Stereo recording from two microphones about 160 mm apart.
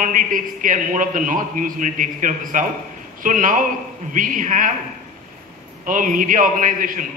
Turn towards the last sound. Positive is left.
turn(degrees=-55)  # may be behind; listen again after turning